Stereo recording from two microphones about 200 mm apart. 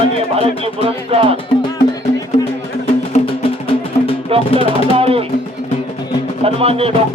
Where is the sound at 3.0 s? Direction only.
30° left (ahead or behind).